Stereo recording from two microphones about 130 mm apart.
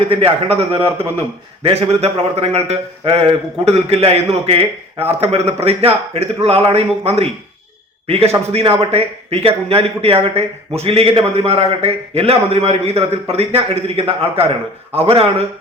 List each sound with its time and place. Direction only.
0.1 s a man's voice: 45° right (ahead or behind)